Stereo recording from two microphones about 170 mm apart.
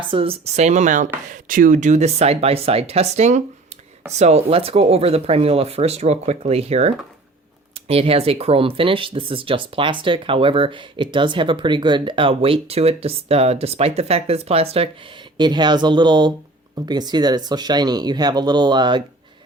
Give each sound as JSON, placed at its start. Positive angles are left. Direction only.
{"t": 0.1, "sound": "speech", "side_deg": -35}